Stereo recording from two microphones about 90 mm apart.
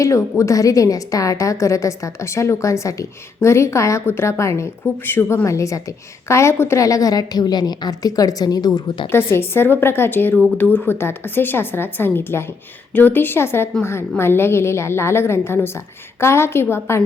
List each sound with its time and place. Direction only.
0.0 s a woman's voice: 35° left (ahead or behind)
5.5 s a woman's voice: 35° left (ahead or behind)
9.1 s a woman's voice: 25° left (ahead or behind)